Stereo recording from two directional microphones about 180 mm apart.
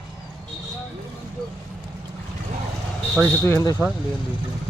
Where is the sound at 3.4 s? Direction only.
15° left (ahead or behind).